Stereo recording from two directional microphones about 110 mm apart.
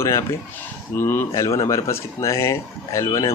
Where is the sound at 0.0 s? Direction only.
25° left (ahead or behind).